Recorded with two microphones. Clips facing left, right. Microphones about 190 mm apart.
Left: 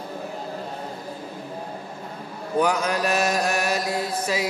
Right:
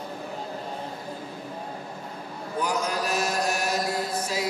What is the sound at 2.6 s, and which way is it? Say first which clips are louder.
Chant: left 5 dB; 65° left (ahead or behind).